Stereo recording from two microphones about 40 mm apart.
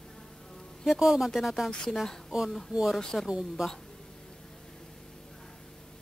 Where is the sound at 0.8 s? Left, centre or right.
Centre.